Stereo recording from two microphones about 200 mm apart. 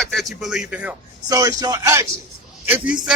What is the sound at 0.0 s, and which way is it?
Speech, centre (ahead or behind).